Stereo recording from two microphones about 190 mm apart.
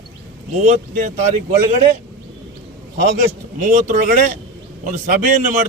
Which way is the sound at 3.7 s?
40° right (ahead or behind).